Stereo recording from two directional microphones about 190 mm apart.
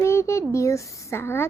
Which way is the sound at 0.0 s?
15° left (ahead or behind).